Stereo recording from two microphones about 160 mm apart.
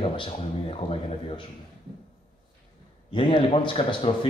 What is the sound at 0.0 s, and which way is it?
A man's voice, 35° left (ahead or behind).